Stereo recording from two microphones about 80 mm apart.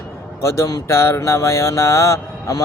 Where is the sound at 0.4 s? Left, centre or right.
Left.